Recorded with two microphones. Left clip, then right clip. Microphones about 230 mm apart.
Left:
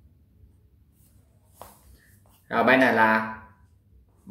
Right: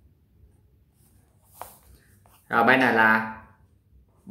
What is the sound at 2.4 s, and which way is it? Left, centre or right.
Speech, centre.